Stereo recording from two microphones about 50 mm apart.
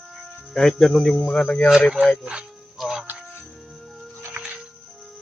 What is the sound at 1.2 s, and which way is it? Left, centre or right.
Speech, left.